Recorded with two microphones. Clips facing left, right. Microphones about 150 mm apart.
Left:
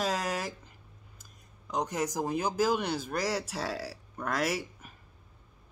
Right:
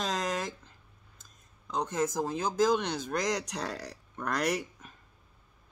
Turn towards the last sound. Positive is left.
turn(degrees=5)  # may be behind; listen again after turning